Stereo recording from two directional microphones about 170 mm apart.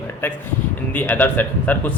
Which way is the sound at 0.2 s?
10° left (ahead or behind).